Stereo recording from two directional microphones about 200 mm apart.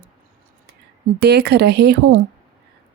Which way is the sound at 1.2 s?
55° right (ahead or behind).